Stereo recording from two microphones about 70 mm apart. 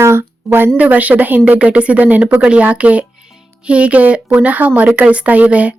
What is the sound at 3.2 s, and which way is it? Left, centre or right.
Music, centre.